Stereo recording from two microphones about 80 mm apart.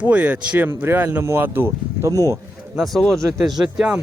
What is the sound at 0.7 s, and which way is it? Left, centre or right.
Speech, right.